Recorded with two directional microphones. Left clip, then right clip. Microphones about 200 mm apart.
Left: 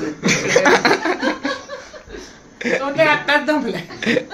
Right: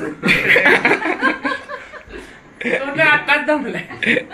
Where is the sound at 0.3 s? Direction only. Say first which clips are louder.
Right 2 dB; 10° left (ahead or behind).